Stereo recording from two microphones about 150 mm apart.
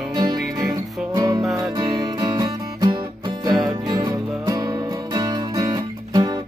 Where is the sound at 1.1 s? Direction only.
25° right (ahead or behind).